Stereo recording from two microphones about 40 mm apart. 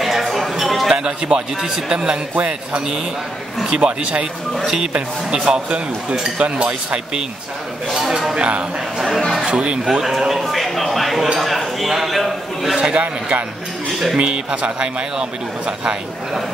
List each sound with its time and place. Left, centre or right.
0.0 s a sound: centre
0.8 s a man's voice: centre
3.6 s a man's voice: right
8.1 s speech: centre
8.4 s a man's voice: right
10.0 s a man's voice: centre
12.7 s a man's voice: right